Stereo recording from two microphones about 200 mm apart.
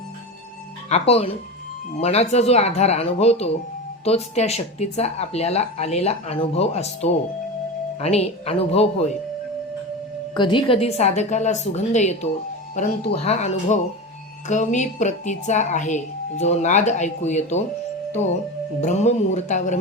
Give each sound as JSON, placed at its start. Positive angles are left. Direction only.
{"t": 0.9, "sound": "speech", "side_deg": 30}
{"t": 10.3, "sound": "speech", "side_deg": 25}
{"t": 18.8, "sound": "speech", "side_deg": 35}